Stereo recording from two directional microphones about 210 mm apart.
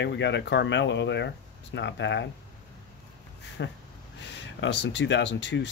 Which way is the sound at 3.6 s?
60° left (ahead or behind).